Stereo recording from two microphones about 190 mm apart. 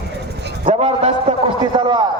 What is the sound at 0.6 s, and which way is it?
A man's voice, 30° right (ahead or behind).